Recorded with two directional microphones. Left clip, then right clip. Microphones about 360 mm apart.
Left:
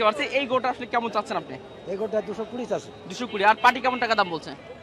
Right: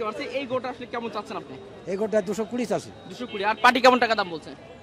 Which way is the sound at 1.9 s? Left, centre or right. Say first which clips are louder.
Right 2 dB; right.